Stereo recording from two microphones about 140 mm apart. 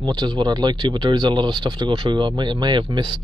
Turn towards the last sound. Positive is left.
turn(degrees=-35)  # may be behind; listen again after turning